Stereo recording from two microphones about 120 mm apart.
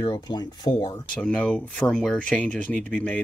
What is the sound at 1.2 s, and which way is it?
Speech, 10° left (ahead or behind).